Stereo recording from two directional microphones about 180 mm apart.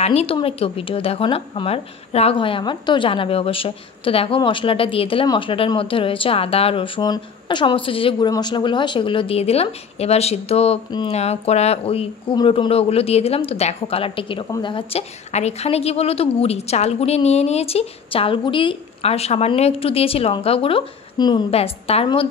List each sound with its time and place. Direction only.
0.0 s a woman's voice: 35° left (ahead or behind)